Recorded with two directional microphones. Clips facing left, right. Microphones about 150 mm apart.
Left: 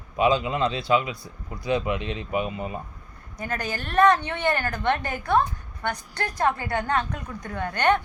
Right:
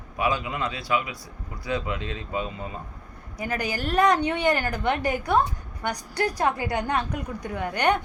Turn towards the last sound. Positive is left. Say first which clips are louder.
# left 1 dB
turn(degrees=-10)  # may be behind; listen again after turning